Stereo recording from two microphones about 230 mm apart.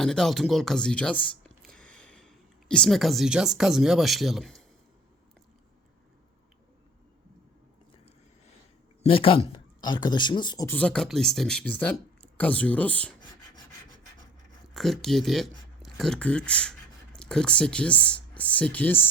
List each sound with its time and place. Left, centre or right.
0.0 s speech: centre
9.0 s speech: left; by 13.1 s centre
14.7 s speech: centre